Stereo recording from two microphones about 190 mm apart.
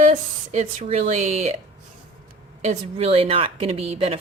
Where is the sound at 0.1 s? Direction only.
35° right (ahead or behind).